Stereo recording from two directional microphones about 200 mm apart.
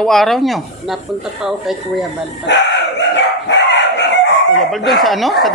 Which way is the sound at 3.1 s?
60° left (ahead or behind).